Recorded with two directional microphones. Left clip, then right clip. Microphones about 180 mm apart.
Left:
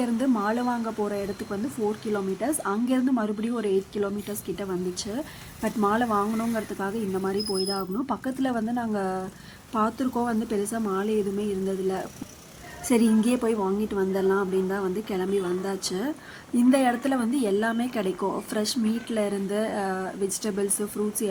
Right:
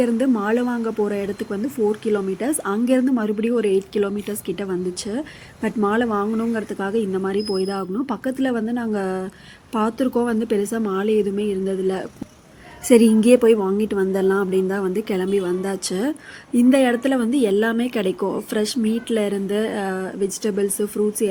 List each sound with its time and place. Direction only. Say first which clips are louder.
0.0 s a woman's voice: right 6 dB; 10° right (ahead or behind)